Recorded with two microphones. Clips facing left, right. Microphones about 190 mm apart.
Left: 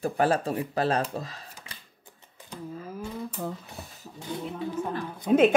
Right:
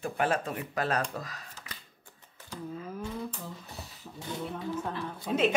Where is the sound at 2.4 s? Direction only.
15° left (ahead or behind).